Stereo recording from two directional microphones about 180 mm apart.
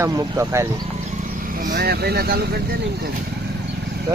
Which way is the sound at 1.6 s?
55° right (ahead or behind).